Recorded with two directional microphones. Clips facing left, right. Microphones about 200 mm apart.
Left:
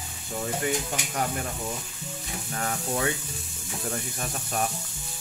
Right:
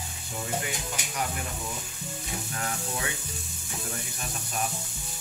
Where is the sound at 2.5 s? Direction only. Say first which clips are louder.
Left 6 dB; 35° left (ahead or behind).